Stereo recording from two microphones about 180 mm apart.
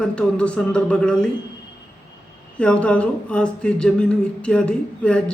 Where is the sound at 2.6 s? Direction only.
5° left (ahead or behind).